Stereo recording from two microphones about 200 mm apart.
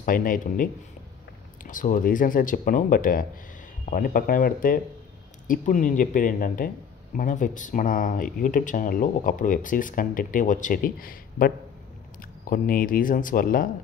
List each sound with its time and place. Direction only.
0.0 s speech: 45° left (ahead or behind)